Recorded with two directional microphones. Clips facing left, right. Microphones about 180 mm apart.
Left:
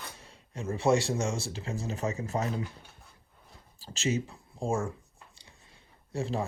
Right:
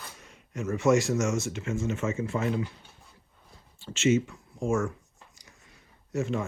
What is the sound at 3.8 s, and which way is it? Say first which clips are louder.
Speech: right 7 dB; 35° left (ahead or behind).